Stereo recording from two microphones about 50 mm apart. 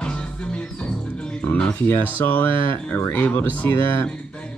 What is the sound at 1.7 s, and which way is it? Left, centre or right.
Speech, left.